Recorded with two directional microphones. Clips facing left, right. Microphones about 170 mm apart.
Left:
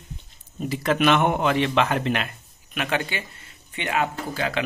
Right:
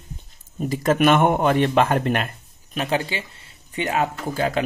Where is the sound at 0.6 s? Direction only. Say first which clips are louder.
Right 3 dB; 45° right (ahead or behind).